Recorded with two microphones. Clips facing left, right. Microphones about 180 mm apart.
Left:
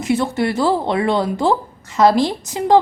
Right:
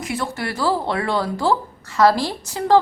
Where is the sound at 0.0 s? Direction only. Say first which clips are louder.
Left 8 dB; 25° left (ahead or behind).